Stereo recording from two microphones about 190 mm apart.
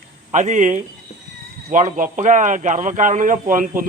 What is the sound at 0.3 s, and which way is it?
Speech, 40° right (ahead or behind).